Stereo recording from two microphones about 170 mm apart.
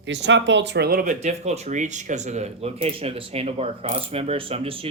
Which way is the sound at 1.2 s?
40° right (ahead or behind).